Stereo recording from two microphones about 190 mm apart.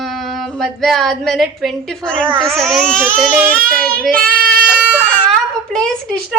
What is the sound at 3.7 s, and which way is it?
Child singing, 50° right (ahead or behind).